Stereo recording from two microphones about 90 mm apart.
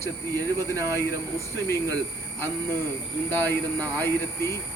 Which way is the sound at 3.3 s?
20° left (ahead or behind).